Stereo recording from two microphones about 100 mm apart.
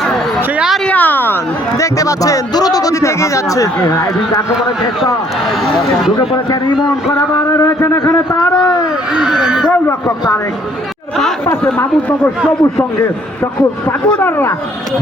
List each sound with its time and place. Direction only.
0.9 s a sound: 15° left (ahead or behind)
1.8 s speech: 35° left (ahead or behind)
6.1 s speech: 40° left (ahead or behind)
7.5 s a man's voice: 30° left (ahead or behind)
9.1 s speech: 5° right (ahead or behind)
14.2 s a man's voice: 25° left (ahead or behind)